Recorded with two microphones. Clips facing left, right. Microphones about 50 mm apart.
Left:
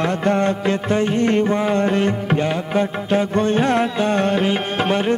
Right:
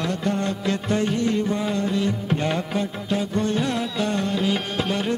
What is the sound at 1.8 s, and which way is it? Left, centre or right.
Music, left.